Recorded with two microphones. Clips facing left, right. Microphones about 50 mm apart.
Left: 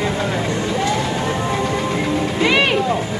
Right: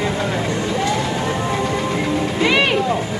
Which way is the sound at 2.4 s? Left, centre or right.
Left.